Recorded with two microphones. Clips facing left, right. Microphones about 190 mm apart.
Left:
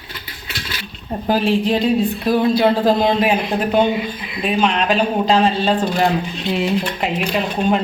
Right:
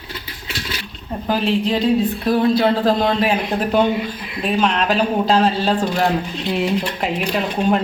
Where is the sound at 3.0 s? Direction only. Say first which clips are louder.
Left 2 dB; 20° left (ahead or behind).